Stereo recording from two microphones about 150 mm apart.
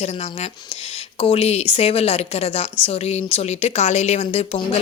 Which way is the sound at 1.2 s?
40° left (ahead or behind).